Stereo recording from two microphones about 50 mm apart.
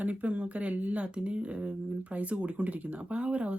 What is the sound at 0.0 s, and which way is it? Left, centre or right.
Speech, right.